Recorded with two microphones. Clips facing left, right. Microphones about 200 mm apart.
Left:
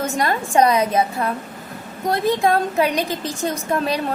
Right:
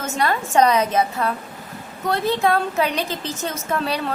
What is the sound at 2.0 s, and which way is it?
A woman's voice, 15° left (ahead or behind).